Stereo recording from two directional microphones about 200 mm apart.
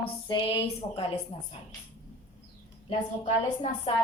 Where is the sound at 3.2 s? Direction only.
30° left (ahead or behind).